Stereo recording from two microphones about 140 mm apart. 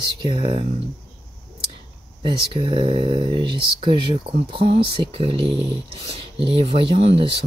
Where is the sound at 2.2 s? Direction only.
35° right (ahead or behind).